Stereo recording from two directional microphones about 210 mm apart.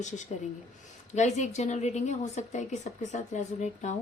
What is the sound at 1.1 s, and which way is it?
A woman's voice, 35° left (ahead or behind).